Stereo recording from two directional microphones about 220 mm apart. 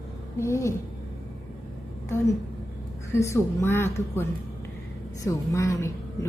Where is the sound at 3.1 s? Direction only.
10° left (ahead or behind).